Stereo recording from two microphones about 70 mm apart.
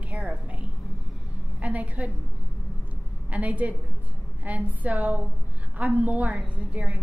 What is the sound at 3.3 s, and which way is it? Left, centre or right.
A woman's voice, right.